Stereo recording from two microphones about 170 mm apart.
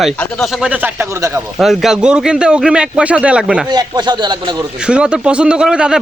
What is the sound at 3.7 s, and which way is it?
Speech, 25° right (ahead or behind).